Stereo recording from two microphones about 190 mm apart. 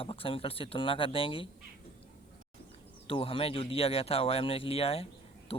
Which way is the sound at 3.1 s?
30° left (ahead or behind).